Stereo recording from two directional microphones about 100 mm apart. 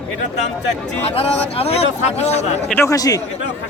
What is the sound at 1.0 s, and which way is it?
Speech, 75° left (ahead or behind).